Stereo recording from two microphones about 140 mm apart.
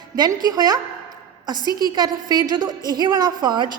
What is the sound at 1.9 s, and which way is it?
A woman's voice, 30° right (ahead or behind).